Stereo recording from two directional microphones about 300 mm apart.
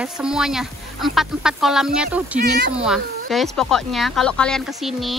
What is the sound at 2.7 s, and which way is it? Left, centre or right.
Speech, centre.